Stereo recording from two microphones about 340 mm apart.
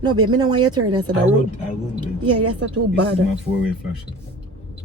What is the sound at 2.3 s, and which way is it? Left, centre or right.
Speech, right.